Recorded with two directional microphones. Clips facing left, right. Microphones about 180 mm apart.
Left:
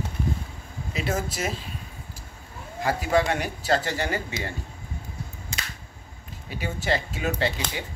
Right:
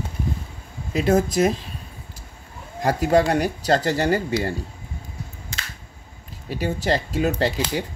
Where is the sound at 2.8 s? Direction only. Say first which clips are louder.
Right 5 dB; 40° right (ahead or behind).